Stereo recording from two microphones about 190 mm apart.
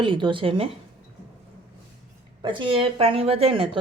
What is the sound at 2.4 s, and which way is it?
Speech, 25° right (ahead or behind).